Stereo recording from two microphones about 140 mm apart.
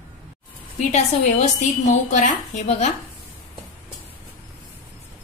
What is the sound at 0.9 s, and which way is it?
A woman's voice, 55° left (ahead or behind).